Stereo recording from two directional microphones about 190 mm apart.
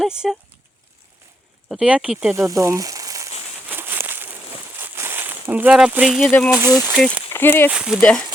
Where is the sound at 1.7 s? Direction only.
5° right (ahead or behind).